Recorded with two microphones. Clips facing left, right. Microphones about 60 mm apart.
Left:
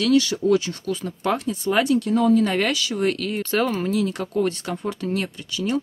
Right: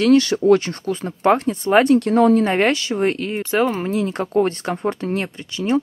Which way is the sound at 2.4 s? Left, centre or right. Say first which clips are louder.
Right 4 dB; right.